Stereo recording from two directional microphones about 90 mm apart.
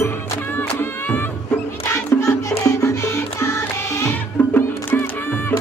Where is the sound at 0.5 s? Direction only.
20° left (ahead or behind).